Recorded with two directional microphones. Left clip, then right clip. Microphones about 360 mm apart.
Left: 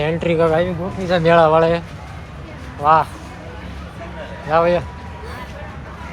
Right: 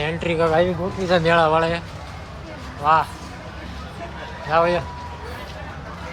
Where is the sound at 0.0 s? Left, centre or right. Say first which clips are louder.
Left 4 dB; centre.